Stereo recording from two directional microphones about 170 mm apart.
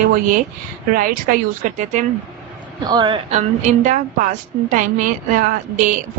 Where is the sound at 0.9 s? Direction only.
55° right (ahead or behind).